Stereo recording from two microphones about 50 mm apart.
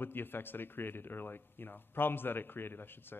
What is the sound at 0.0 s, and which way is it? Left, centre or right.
A man's voice, left.